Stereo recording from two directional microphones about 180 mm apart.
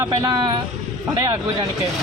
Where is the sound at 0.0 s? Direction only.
25° right (ahead or behind).